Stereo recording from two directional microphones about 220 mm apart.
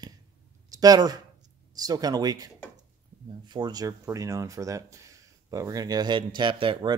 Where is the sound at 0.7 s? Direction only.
15° right (ahead or behind).